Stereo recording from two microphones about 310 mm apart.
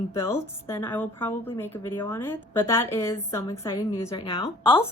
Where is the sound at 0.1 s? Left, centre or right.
Centre.